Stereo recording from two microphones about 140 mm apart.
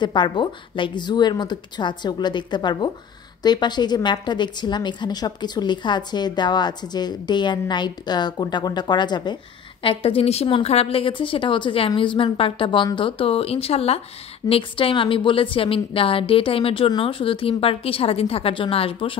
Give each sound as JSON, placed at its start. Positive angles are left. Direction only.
{"t": 0.0, "sound": "a woman's voice", "side_deg": 35}
{"t": 9.8, "sound": "a woman's voice", "side_deg": 45}